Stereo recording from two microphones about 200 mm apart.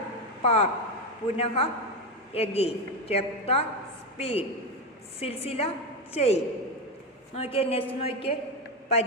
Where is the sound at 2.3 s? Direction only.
30° left (ahead or behind).